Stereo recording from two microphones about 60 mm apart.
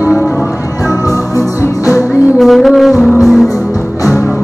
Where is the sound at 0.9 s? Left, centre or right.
Left.